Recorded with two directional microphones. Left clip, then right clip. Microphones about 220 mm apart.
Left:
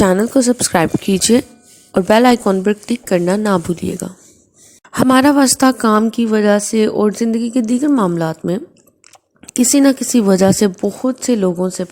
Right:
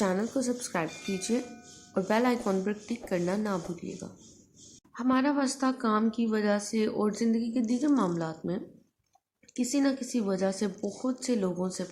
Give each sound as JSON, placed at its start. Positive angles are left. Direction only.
{"t": 0.0, "sound": "a woman's voice", "side_deg": 45}
{"t": 10.8, "sound": "a woman's voice", "side_deg": 30}